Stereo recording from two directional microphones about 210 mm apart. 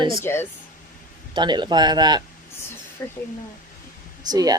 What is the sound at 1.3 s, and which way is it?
Speech, 20° right (ahead or behind).